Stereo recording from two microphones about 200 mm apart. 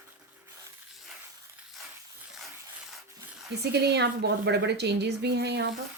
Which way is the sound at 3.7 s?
55° right (ahead or behind).